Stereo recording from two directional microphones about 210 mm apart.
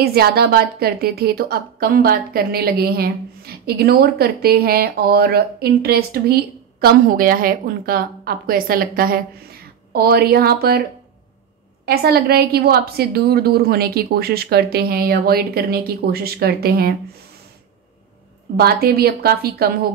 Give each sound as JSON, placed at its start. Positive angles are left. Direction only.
{"t": 0.0, "sound": "a woman's voice", "side_deg": -50}
{"t": 11.8, "sound": "a woman's voice", "side_deg": -50}
{"t": 18.6, "sound": "a woman's voice", "side_deg": -45}